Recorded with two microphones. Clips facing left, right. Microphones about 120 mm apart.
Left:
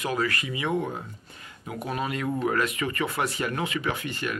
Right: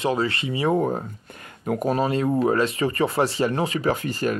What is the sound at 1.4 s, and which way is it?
Speech, 50° right (ahead or behind).